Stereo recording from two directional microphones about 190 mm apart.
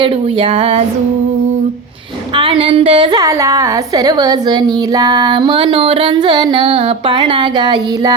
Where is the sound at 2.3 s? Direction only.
25° right (ahead or behind).